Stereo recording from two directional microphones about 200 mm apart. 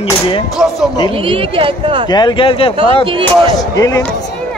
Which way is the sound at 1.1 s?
25° right (ahead or behind).